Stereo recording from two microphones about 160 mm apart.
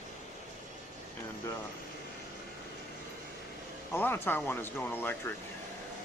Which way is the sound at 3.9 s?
15° left (ahead or behind).